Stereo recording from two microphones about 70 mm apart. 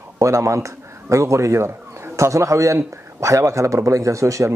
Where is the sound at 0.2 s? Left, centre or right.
Right.